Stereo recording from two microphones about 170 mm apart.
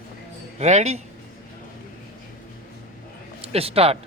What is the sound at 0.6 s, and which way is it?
Speech, 40° right (ahead or behind).